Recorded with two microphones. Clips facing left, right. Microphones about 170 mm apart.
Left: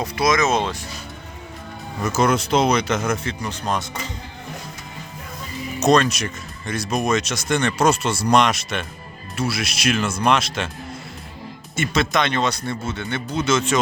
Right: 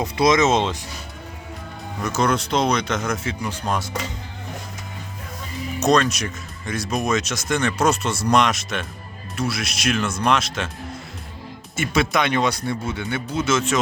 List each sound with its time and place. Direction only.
0.0 s speech: 25° right (ahead or behind)
2.0 s speech: 5° left (ahead or behind)
3.2 s speech: 10° right (ahead or behind)
5.8 s speech: centre (ahead or behind)
11.8 s speech: 10° right (ahead or behind)